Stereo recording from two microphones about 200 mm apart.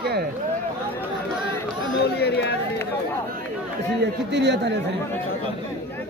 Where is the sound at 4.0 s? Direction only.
60° right (ahead or behind).